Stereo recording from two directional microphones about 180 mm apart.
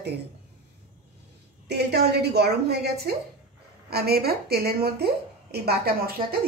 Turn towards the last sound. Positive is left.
turn(degrees=-60)  # may be behind; listen again after turning